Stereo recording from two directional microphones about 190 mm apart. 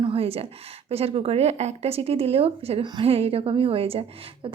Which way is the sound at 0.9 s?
30° right (ahead or behind).